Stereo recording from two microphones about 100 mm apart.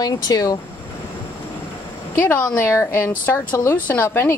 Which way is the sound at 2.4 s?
25° left (ahead or behind).